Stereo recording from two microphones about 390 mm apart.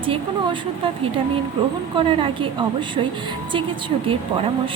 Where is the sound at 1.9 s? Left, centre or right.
Centre.